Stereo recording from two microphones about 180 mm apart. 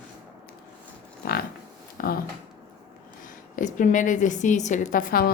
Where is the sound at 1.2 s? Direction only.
55° left (ahead or behind).